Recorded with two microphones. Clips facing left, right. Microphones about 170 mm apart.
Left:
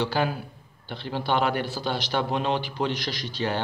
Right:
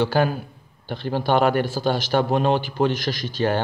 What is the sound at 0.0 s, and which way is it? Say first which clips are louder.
A man's voice: right 5 dB; 50° right (ahead or behind).